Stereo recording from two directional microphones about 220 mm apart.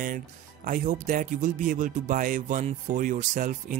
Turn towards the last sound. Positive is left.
turn(degrees=-35)  # may be behind; listen again after turning